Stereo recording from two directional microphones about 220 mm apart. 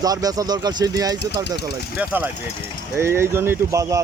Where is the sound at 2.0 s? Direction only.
5° right (ahead or behind).